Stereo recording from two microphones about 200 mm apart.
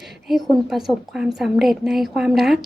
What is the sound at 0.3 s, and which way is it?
A woman's voice, centre (ahead or behind).